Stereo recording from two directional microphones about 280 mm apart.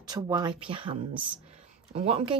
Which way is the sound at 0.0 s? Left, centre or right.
Centre.